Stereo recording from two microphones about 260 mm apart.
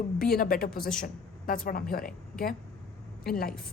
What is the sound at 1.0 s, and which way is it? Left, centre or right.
A woman's voice, left.